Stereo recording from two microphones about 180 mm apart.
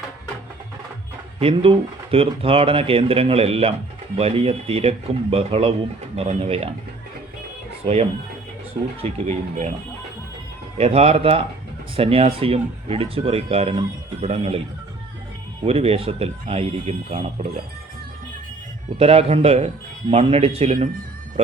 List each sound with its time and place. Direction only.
1.4 s speech: 30° right (ahead or behind)
9.0 s speech: 35° right (ahead or behind)
10.8 s speech: 35° right (ahead or behind)
15.6 s speech: 35° right (ahead or behind)
18.9 s speech: 35° right (ahead or behind)